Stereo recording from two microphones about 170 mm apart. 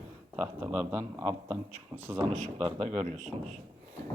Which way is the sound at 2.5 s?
30° right (ahead or behind).